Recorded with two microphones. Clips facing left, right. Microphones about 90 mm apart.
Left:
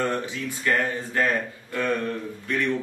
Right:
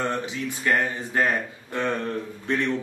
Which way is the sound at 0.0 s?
20° right (ahead or behind).